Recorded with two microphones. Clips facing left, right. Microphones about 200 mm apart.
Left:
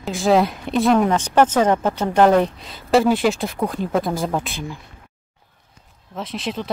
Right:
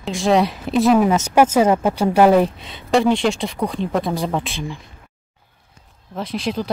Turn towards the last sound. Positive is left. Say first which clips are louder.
# right 3 dB
turn(degrees=0)  # may be behind; listen again after turning